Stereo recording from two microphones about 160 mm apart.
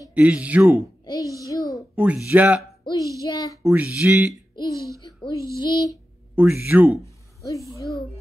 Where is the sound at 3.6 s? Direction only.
20° right (ahead or behind).